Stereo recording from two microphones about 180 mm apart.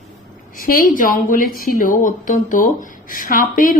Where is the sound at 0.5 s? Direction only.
50° left (ahead or behind).